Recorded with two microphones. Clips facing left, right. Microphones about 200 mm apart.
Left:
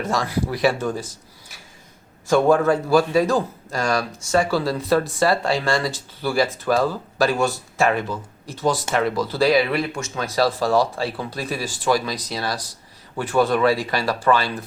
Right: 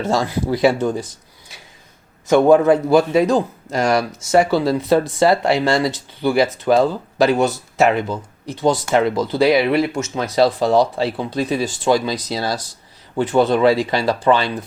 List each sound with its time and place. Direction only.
0.0 s a man's voice: 25° right (ahead or behind)
2.2 s a man's voice: 20° right (ahead or behind)